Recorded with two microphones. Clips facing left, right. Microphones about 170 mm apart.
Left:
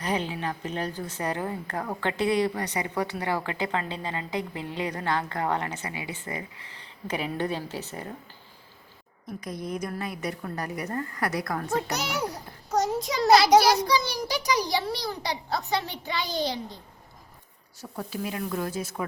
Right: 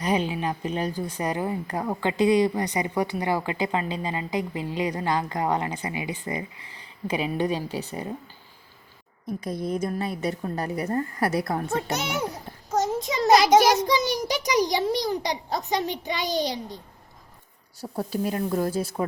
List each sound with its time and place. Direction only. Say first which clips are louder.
0.0 s a woman's voice: right 4 dB; 15° right (ahead or behind)
9.4 s a woman's voice: right 5 dB; 30° right (ahead or behind)
12.3 s a child's voice: right 1 dB; centre (ahead or behind)
13.6 s a woman's voice: right 2 dB; 20° right (ahead or behind)
17.7 s speech: right 6 dB; 35° right (ahead or behind)